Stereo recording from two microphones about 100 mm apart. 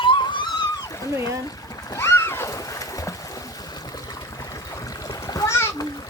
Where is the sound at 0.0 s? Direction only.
55° left (ahead or behind).